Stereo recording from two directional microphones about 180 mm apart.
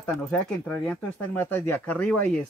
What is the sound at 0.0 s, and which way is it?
Speech, 5° left (ahead or behind).